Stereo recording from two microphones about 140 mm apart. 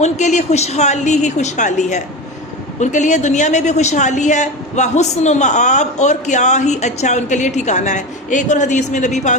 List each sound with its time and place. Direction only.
0.0 s a woman's voice: 55° left (ahead or behind)